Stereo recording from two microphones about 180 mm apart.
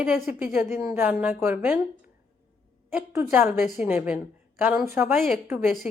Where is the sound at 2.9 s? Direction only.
10° right (ahead or behind).